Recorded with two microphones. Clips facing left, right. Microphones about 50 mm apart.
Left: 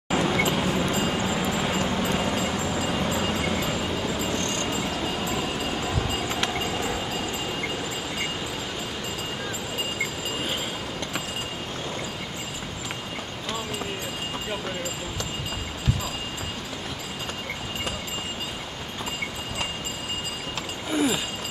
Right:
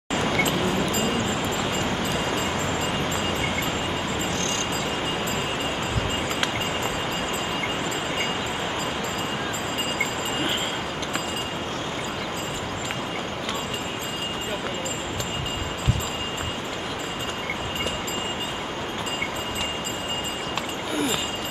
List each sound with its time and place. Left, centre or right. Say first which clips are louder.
0.2 s vehicle: right 1 dB; right
1.8 s vehicle: even; right
20.9 s a sound: left 3 dB; centre